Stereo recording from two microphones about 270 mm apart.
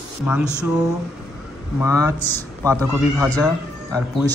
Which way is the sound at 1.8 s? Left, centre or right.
Centre.